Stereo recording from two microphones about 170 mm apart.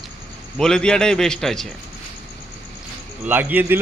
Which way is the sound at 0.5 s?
5° left (ahead or behind).